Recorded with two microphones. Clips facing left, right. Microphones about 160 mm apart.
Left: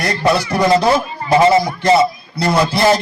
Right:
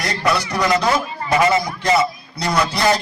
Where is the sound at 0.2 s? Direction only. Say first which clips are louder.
Left 4 dB; 30° left (ahead or behind).